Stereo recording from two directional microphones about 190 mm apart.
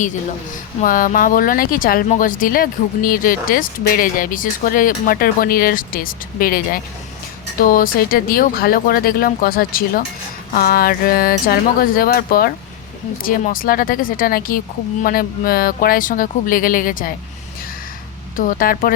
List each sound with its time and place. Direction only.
0.8 s speech: 45° left (ahead or behind)
18.3 s speech: 45° left (ahead or behind)